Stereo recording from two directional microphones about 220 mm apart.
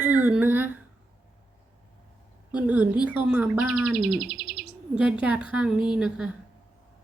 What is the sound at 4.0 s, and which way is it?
Bird, 45° right (ahead or behind).